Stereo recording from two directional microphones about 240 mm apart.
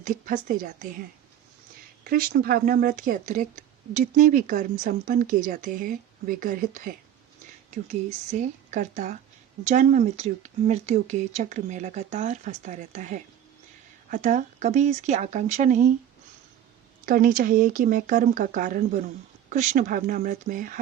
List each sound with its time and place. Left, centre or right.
0.0 s speech: right
2.0 s speech: right
17.1 s speech: right